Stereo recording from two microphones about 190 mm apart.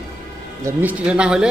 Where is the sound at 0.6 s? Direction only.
10° right (ahead or behind).